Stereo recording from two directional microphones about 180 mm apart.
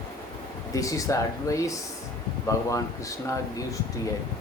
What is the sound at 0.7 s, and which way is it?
Speech, 20° left (ahead or behind).